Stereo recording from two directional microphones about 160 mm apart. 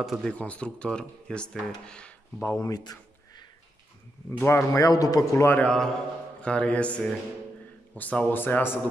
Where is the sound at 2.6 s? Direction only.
25° left (ahead or behind).